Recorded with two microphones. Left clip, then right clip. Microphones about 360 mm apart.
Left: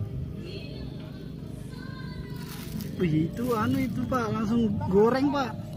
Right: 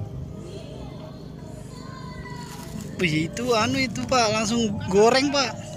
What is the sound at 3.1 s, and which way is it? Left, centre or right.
Speech, right.